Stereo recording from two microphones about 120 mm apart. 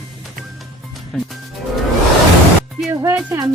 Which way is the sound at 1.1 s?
5° left (ahead or behind).